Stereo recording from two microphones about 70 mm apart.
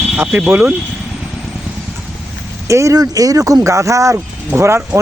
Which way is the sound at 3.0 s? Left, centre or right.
Right.